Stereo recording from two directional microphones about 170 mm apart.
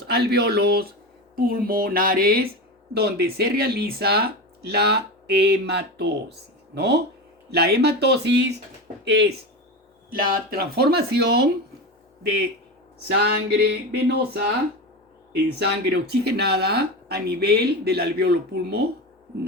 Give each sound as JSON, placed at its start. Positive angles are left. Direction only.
{"t": 0.1, "sound": "speech", "side_deg": -70}
{"t": 10.1, "sound": "speech", "side_deg": -60}
{"t": 13.2, "sound": "speech", "side_deg": -75}
{"t": 15.5, "sound": "speech", "side_deg": -75}